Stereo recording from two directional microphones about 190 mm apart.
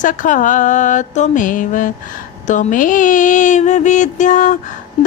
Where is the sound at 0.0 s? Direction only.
45° left (ahead or behind).